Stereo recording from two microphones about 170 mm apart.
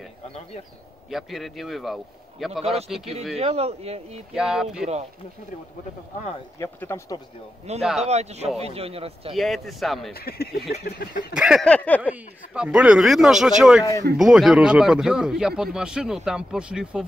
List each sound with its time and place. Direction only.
1.1 s speech: centre (ahead or behind)
3.3 s speech: 35° right (ahead or behind)
4.3 s speech: 5° right (ahead or behind)
6.6 s speech: 15° left (ahead or behind)
7.7 s speech: 40° right (ahead or behind)
9.3 s speech: centre (ahead or behind)
10.1 s a sound: 65° left (ahead or behind)
11.3 s speech: 5° right (ahead or behind)
12.0 s speech: 10° right (ahead or behind)